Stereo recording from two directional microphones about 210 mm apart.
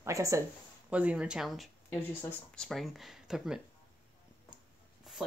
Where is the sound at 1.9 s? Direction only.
10° left (ahead or behind).